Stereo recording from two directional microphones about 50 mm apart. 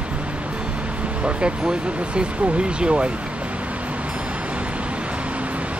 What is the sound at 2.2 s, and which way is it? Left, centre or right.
Speech, right.